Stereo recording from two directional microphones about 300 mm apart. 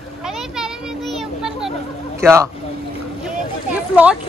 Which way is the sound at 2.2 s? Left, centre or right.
Centre.